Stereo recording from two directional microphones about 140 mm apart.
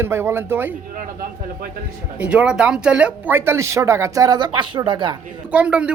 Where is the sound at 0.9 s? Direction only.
85° right.